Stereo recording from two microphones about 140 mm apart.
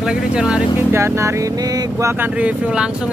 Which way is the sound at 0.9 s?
20° right (ahead or behind).